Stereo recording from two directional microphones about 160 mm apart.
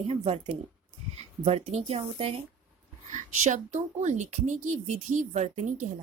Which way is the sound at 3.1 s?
50° right (ahead or behind).